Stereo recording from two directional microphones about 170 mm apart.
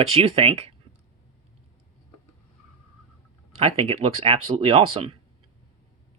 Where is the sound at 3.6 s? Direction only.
35° right (ahead or behind).